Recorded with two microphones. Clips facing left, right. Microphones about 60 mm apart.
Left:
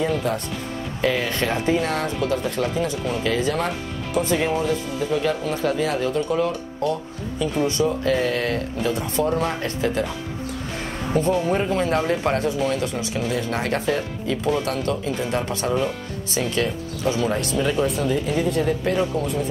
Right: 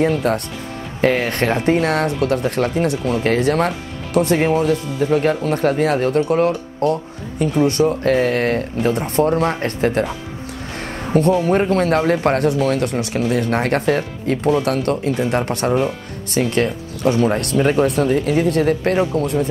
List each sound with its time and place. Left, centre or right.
0.0 s speech: right
10.8 s a sound: right
11.4 s speech: right
17.8 s speech: right